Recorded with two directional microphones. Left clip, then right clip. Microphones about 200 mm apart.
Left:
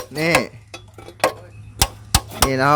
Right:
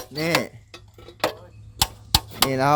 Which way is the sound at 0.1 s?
Centre (ahead or behind).